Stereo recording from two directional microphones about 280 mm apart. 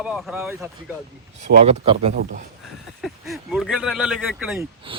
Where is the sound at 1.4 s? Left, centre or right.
Right.